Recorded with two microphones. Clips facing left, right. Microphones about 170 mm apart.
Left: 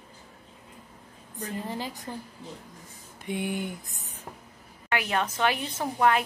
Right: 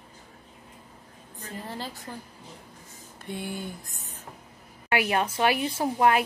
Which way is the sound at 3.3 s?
15° left (ahead or behind).